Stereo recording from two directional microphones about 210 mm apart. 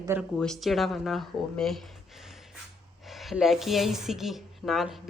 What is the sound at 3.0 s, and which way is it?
A woman's voice, centre (ahead or behind).